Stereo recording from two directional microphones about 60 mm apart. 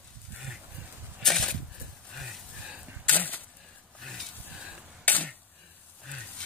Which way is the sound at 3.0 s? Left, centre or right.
Left.